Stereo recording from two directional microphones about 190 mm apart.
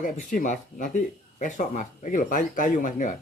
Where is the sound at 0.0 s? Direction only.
45° left (ahead or behind).